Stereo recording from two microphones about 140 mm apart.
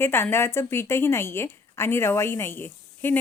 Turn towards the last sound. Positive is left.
turn(degrees=15)  # may be behind; listen again after turning